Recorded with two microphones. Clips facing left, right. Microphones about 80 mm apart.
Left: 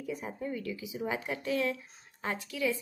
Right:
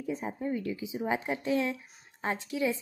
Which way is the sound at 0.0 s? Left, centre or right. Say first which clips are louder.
Right 3 dB; right.